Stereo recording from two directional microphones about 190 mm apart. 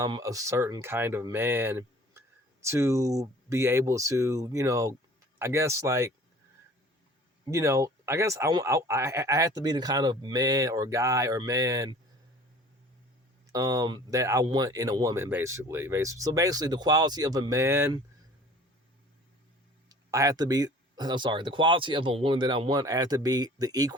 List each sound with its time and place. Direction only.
0.0 s speech: 15° right (ahead or behind)
7.5 s speech: 15° right (ahead or behind)
13.5 s speech: 20° right (ahead or behind)
19.9 s speech: 15° right (ahead or behind)